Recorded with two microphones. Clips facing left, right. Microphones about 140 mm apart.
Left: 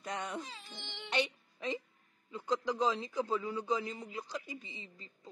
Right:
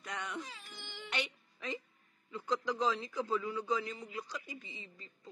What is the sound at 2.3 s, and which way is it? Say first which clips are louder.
A man's voice: left 1 dB; 20° left (ahead or behind).